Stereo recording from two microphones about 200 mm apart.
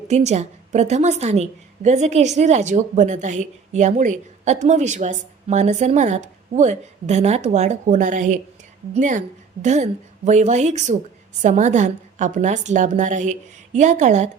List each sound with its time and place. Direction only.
0.1 s a woman's voice: 35° right (ahead or behind)